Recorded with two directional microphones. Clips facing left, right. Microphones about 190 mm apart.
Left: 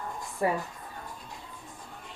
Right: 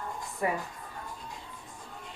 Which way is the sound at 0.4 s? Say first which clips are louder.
Left 3 dB; 35° left (ahead or behind).